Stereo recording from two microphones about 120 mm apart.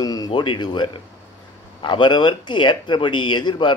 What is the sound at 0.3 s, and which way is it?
Speech, 40° left (ahead or behind).